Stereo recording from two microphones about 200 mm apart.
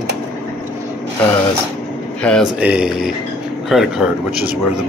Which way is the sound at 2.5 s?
5° right (ahead or behind).